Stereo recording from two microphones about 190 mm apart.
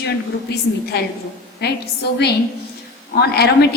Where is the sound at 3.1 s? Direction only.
60° left (ahead or behind).